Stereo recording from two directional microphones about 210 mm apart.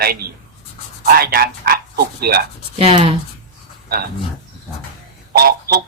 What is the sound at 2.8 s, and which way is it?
Speech, 25° right (ahead or behind).